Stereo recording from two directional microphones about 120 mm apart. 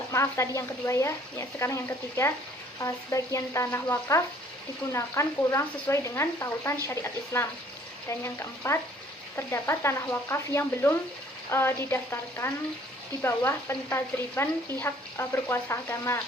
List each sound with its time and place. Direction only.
0.1 s speech: 25° left (ahead or behind)